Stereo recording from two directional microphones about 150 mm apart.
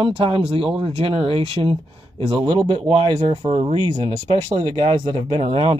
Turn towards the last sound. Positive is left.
turn(degrees=-35)  # may be behind; listen again after turning